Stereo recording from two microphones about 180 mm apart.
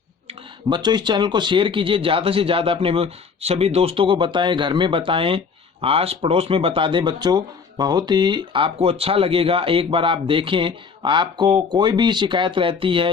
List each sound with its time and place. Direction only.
0.3 s speech: 25° right (ahead or behind)